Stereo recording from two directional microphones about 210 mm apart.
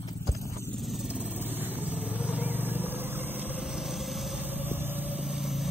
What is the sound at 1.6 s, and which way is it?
Vehicle, 10° right (ahead or behind).